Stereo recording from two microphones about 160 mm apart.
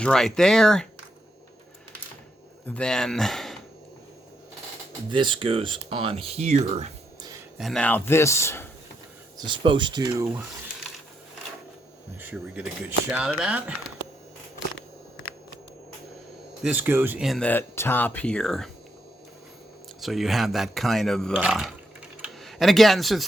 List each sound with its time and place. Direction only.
0.0 s speech: 5° left (ahead or behind)
2.6 s speech: 5° left (ahead or behind)
5.1 s speech: 30° right (ahead or behind)
7.2 s a sound: 25° right (ahead or behind)
7.6 s speech: 5° left (ahead or behind)
9.4 s speech: 30° right (ahead or behind)
12.2 s speech: 10° right (ahead or behind)
16.6 s speech: 10° right (ahead or behind)
17.2 s speech: 5° left (ahead or behind)
20.0 s speech: centre (ahead or behind)